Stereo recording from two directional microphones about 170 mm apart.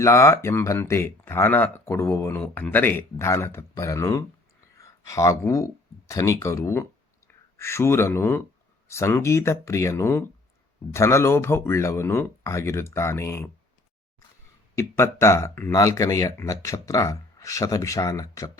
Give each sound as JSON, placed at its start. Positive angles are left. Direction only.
{"t": 0.0, "sound": "speech", "side_deg": 15}
{"t": 14.8, "sound": "speech", "side_deg": 15}